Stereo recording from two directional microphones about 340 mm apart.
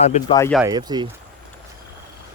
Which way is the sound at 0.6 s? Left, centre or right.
Centre.